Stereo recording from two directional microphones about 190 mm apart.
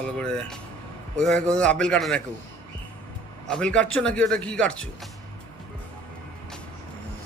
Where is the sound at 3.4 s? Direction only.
5° left (ahead or behind).